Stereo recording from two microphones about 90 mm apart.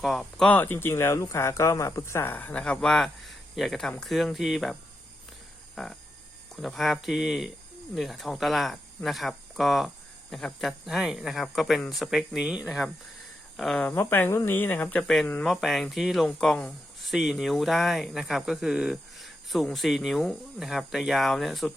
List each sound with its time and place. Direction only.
0.0 s speech: centre (ahead or behind)
0.4 s speech: 20° left (ahead or behind); by 4.8 s centre (ahead or behind)
5.7 s a sound: 5° left (ahead or behind)
6.6 s speech: centre (ahead or behind)
13.9 s speech: 25° left (ahead or behind)
15.4 s speech: centre (ahead or behind)